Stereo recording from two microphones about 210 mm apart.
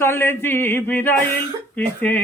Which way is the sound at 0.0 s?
10° left (ahead or behind).